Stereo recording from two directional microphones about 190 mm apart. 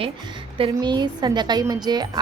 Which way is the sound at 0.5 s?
25° right (ahead or behind).